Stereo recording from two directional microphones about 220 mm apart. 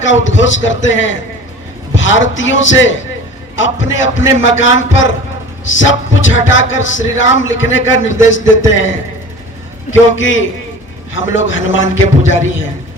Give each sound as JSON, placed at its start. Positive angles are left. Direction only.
{"t": 0.0, "sound": "speech", "side_deg": 60}